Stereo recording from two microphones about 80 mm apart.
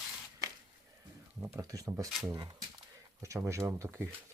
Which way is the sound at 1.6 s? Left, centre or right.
Right.